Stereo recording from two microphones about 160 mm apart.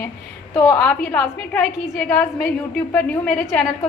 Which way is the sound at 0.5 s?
15° left (ahead or behind).